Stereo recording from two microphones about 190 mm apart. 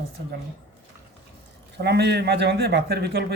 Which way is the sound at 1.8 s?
60° right (ahead or behind).